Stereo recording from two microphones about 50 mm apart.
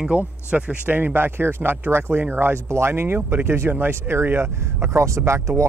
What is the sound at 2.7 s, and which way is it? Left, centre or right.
Speech, right.